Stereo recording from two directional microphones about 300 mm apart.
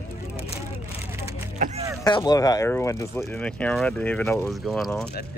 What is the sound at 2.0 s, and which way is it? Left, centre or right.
Speech, centre.